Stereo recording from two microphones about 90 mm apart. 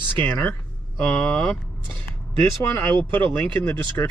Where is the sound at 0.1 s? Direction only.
20° left (ahead or behind).